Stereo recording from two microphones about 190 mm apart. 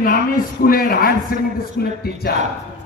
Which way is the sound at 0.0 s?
45° left (ahead or behind).